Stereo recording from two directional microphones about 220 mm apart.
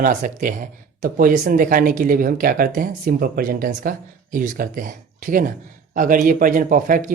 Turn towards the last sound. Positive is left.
turn(degrees=-35)  # may be behind; listen again after turning